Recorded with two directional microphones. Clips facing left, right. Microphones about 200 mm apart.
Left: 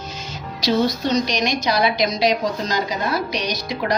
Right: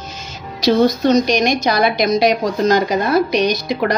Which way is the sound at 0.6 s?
50° right (ahead or behind).